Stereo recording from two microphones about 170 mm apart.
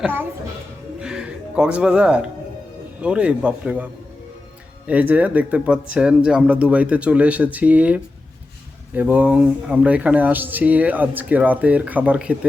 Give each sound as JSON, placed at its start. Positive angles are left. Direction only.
{"t": 0.9, "sound": "music", "side_deg": -5}
{"t": 3.0, "sound": "speech", "side_deg": -5}
{"t": 4.9, "sound": "speech", "side_deg": -10}